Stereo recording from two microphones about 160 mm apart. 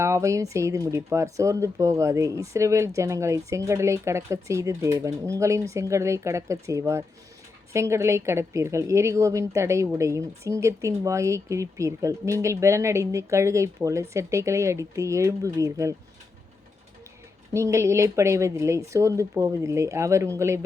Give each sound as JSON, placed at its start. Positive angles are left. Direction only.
{"t": 0.0, "sound": "a woman's voice", "side_deg": -20}
{"t": 17.5, "sound": "speech", "side_deg": -20}